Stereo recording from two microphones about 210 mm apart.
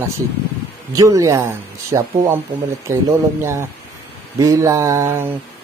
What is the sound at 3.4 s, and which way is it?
Speech, 10° right (ahead or behind).